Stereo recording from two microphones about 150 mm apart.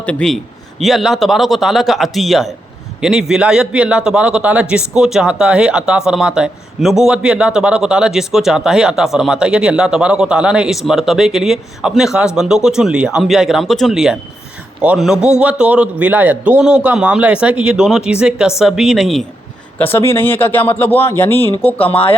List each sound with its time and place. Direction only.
0.0 s a man's voice: 5° left (ahead or behind)
19.8 s a man's voice: 15° left (ahead or behind)
21.8 s speech: 40° left (ahead or behind)